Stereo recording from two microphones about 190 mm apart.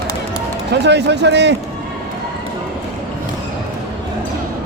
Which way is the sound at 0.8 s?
65° right (ahead or behind).